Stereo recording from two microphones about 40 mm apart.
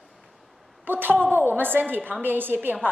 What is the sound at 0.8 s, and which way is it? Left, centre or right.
A woman's voice, right.